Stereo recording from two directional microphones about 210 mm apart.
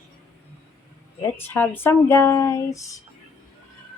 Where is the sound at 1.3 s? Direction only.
10° left (ahead or behind).